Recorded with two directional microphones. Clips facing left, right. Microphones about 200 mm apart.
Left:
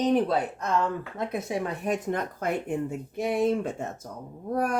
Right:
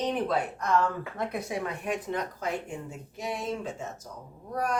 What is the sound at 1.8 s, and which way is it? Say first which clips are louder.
Speech: left 3 dB; 45° left (ahead or behind).